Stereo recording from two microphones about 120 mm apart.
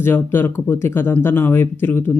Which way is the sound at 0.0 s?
20° left (ahead or behind).